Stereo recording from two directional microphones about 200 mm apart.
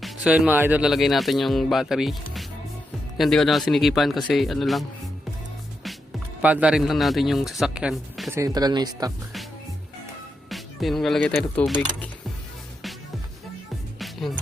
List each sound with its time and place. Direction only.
0.0 s speech: 5° right (ahead or behind)
6.4 s speech: 5° right (ahead or behind)
8.3 s speech: 15° right (ahead or behind)
10.5 s speech: centre (ahead or behind)
14.0 s music: centre (ahead or behind)